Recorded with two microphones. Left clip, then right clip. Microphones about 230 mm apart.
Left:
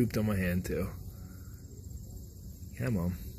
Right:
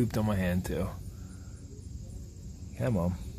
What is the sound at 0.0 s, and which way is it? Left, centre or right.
Speech, centre.